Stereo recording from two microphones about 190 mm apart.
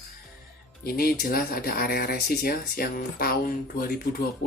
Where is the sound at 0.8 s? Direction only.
50° left (ahead or behind).